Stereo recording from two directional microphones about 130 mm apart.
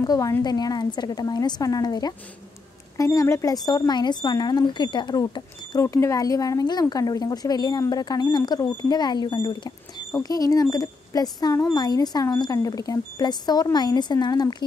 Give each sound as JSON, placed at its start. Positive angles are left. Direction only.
{"t": 0.0, "sound": "speech", "side_deg": 25}